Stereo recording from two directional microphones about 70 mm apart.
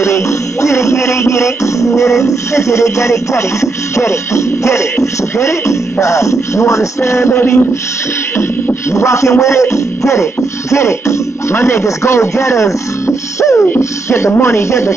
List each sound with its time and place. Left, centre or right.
0.0 s music: left
7.3 s a sound: left
8.4 s beatboxing: left
9.4 s music: left
13.7 s speech: left